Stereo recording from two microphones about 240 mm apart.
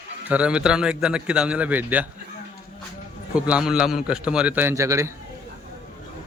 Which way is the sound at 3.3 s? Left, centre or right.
Centre.